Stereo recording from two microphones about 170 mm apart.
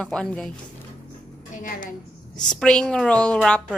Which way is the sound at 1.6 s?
50° left (ahead or behind).